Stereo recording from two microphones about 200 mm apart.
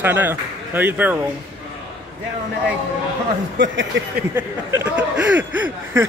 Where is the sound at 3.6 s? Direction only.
65° right (ahead or behind).